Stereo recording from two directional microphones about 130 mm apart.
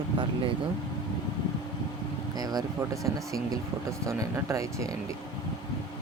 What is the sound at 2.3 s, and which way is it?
Speech, 30° right (ahead or behind).